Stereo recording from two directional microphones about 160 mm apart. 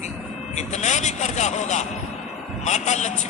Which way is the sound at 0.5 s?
45° left (ahead or behind).